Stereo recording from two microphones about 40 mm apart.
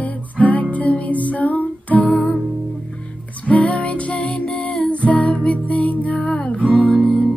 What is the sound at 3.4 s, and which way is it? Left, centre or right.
Music, left.